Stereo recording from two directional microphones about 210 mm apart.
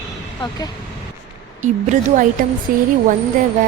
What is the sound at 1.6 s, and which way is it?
Speech, 35° right (ahead or behind).